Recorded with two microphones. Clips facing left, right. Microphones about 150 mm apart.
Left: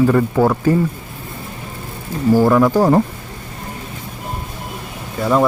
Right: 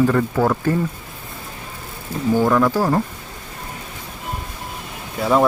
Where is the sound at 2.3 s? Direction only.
10° left (ahead or behind).